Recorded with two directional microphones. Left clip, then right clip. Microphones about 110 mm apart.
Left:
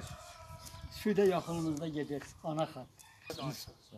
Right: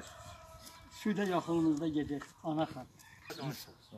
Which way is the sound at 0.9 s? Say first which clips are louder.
Left 5 dB; 30° left (ahead or behind).